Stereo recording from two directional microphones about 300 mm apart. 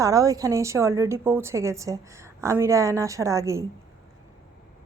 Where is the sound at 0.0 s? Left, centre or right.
Centre.